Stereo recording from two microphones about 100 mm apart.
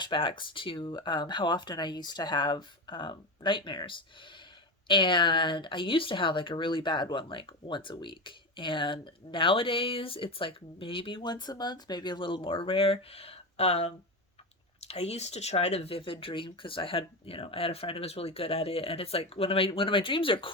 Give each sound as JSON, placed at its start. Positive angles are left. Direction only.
{"t": 0.0, "sound": "speech", "side_deg": 55}